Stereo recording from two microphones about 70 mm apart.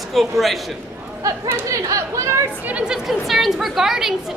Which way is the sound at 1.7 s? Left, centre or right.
Right.